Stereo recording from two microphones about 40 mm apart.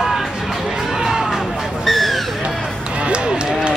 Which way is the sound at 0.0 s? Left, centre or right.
Centre.